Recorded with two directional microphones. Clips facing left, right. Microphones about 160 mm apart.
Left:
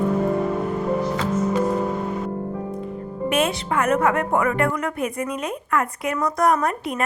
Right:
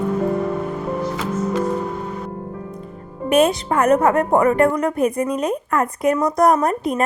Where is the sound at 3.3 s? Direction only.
40° right (ahead or behind).